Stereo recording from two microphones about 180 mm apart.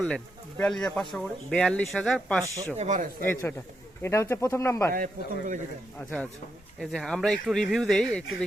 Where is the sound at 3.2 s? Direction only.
10° left (ahead or behind).